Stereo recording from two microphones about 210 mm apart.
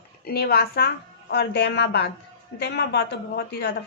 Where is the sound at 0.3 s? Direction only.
45° left (ahead or behind).